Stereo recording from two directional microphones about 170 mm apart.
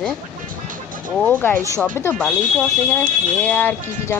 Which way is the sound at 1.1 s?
10° left (ahead or behind).